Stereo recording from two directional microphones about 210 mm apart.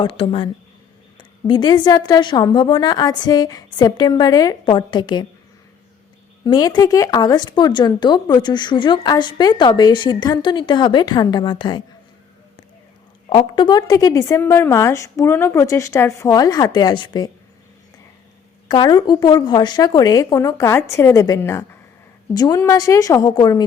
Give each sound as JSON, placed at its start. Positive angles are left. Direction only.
{"t": 0.0, "sound": "speech", "side_deg": 25}
{"t": 6.4, "sound": "speech", "side_deg": 20}
{"t": 13.3, "sound": "a woman's voice", "side_deg": 20}
{"t": 18.7, "sound": "a woman's voice", "side_deg": 20}